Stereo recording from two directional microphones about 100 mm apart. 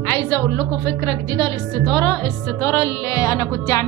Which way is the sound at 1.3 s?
25° left (ahead or behind).